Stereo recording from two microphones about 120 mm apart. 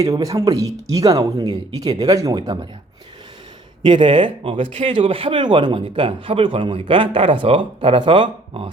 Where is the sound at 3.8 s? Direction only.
40° right (ahead or behind).